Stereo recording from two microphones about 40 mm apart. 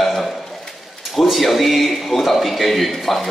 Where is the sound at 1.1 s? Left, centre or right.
Centre.